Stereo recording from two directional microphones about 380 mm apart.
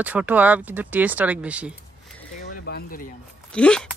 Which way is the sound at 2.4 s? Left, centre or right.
Left.